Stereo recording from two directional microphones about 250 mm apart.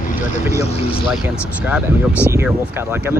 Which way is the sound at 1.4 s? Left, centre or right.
Centre.